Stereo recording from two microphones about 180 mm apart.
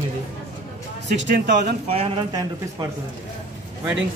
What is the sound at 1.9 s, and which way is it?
Speech, 30° right (ahead or behind).